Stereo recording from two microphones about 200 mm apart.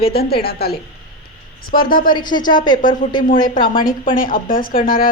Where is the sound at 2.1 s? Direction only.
20° left (ahead or behind).